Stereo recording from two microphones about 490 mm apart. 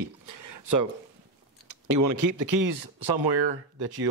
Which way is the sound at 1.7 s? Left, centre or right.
Right.